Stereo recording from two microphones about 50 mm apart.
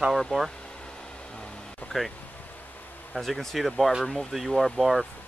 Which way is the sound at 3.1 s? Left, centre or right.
Centre.